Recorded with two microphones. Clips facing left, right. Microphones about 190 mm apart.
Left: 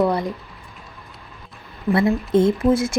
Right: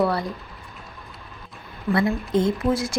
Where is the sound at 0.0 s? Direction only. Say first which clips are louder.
Left 3 dB; 20° left (ahead or behind).